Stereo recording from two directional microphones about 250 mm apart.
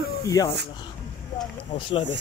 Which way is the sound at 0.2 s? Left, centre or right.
Centre.